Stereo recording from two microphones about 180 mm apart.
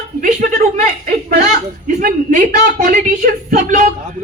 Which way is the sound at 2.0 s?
50° right (ahead or behind).